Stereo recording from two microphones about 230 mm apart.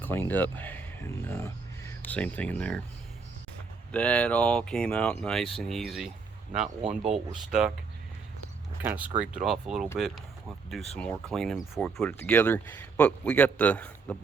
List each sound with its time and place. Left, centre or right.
0.0 s speech: centre
3.9 s speech: centre
7.0 s speech: right
8.8 s speech: centre
10.9 s speech: centre